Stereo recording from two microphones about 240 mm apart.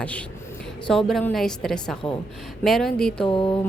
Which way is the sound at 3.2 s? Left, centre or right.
Left.